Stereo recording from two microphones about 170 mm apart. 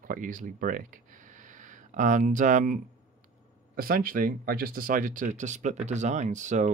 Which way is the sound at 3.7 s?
55° right (ahead or behind).